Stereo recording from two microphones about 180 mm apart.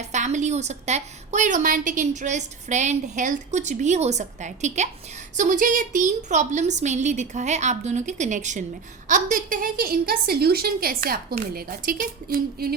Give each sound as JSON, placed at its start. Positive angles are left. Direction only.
{"t": 0.0, "sound": "a woman's voice", "side_deg": -40}